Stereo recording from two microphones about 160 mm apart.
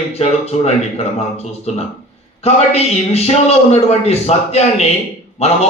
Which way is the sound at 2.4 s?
40° left (ahead or behind).